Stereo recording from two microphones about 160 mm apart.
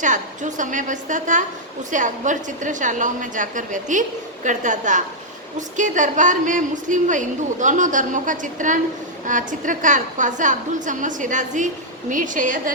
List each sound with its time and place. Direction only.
0.0 s a woman's voice: 50° right (ahead or behind)